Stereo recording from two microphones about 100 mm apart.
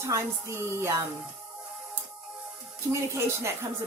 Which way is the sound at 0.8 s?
30° right (ahead or behind).